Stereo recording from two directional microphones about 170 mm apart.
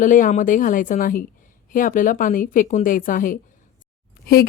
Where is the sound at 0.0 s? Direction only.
50° left (ahead or behind).